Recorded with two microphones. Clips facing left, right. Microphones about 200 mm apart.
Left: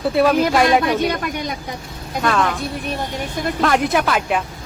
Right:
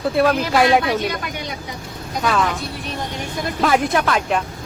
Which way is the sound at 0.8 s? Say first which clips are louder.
Left 2 dB; 50° left (ahead or behind).